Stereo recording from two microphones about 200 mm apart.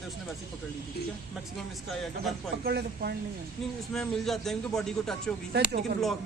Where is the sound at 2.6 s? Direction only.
50° right (ahead or behind).